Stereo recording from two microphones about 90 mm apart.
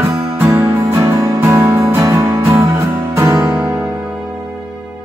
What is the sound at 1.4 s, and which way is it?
Music, 25° right (ahead or behind).